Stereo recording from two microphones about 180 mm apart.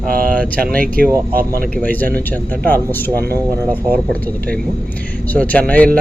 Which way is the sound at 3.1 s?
60° right (ahead or behind).